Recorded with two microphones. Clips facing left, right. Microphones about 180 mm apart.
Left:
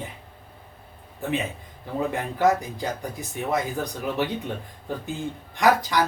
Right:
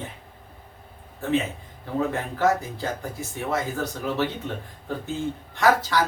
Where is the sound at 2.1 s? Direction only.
15° left (ahead or behind).